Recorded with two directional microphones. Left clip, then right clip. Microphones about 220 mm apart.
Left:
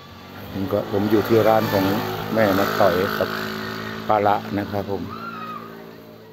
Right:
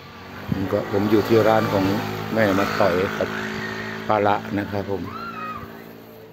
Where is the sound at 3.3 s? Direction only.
55° left (ahead or behind).